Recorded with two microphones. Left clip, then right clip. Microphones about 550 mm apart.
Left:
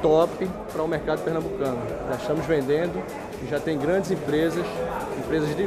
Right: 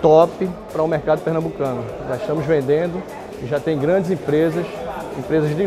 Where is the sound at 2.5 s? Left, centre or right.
Right.